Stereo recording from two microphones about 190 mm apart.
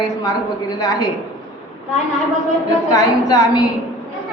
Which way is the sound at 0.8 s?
20° left (ahead or behind).